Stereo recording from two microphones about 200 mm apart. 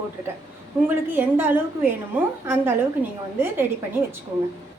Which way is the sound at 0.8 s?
10° right (ahead or behind).